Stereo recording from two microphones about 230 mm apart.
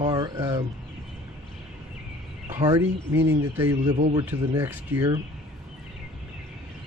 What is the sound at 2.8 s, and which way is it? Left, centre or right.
Speech, right.